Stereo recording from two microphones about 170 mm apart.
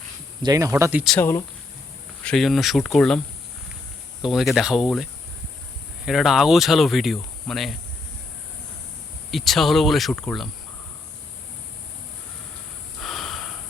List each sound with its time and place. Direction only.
0.4 s speech: 20° right (ahead or behind)
1.1 s speech: 15° left (ahead or behind)
2.2 s speech: centre (ahead or behind)
4.2 s speech: centre (ahead or behind)
6.1 s speech: centre (ahead or behind)
9.3 s speech: centre (ahead or behind)
13.0 s snort: centre (ahead or behind)